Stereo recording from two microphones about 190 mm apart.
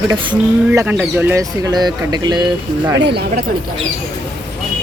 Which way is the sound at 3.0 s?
65° right (ahead or behind).